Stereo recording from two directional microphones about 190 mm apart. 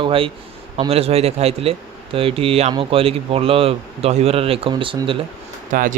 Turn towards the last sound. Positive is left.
turn(degrees=-45)  # may be behind; listen again after turning